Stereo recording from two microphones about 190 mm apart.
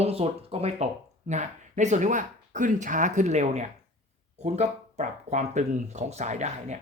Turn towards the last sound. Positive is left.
turn(degrees=-40)  # may be behind; listen again after turning